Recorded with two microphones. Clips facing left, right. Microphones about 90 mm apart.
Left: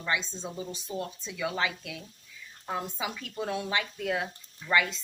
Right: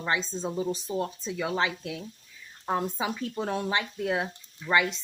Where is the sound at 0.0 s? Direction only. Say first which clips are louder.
Right 3 dB; 35° right (ahead or behind).